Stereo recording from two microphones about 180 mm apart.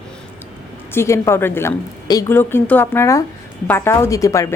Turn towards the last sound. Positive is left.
turn(degrees=15)  # may be behind; listen again after turning